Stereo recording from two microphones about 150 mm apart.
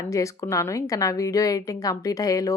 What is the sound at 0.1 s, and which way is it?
A woman's voice, 20° left (ahead or behind).